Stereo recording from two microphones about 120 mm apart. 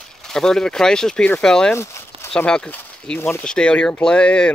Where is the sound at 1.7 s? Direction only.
25° left (ahead or behind).